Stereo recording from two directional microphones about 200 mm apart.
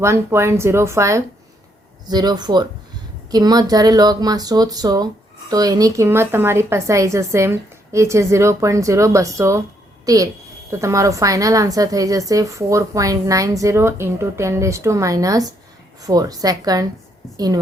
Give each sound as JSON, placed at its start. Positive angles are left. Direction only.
{"t": 0.0, "sound": "a woman's voice", "side_deg": -15}